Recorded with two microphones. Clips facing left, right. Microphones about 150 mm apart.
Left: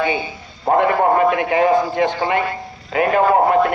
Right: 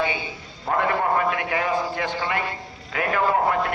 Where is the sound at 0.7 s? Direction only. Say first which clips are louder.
Left 7 dB; 25° left (ahead or behind).